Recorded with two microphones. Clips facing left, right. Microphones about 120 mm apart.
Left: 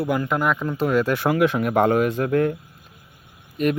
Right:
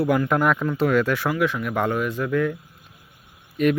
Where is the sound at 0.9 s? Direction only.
35° left (ahead or behind).